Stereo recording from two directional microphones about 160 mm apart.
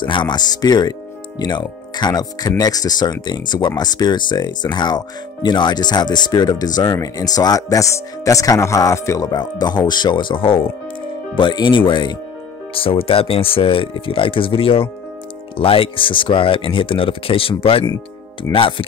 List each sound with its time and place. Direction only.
0.0 s speech: 30° left (ahead or behind)